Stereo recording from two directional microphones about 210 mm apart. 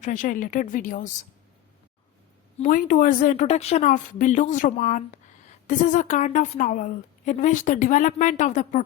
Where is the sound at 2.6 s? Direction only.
40° left (ahead or behind).